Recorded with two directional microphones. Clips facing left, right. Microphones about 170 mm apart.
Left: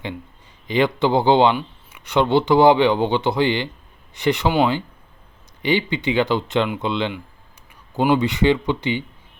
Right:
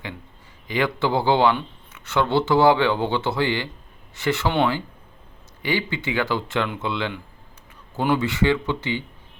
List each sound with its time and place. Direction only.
0.7 s speech: 20° left (ahead or behind)